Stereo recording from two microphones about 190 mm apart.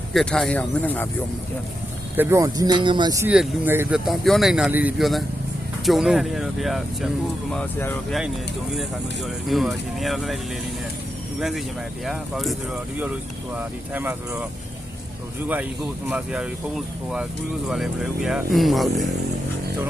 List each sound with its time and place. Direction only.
0.1 s speech: 5° left (ahead or behind)
2.1 s speech: 15° right (ahead or behind)
3.2 s speech: 10° right (ahead or behind)
7.5 s speech: 10° left (ahead or behind)
9.5 s speech: centre (ahead or behind)
11.3 s speech: centre (ahead or behind)
16.0 s speech: 5° right (ahead or behind)